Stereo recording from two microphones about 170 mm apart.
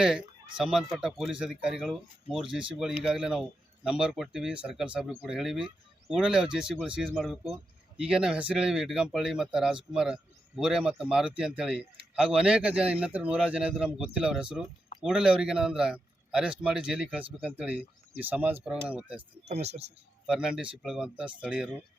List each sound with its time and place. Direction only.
0.0 s a man's voice: 5° right (ahead or behind)
19.5 s speech: 40° right (ahead or behind)
20.2 s a man's voice: 5° right (ahead or behind)